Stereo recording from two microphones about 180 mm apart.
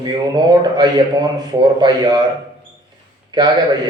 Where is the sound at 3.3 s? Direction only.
25° right (ahead or behind).